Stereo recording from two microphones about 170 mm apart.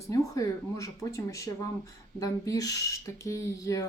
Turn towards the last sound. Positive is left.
turn(degrees=20)  # may be behind; listen again after turning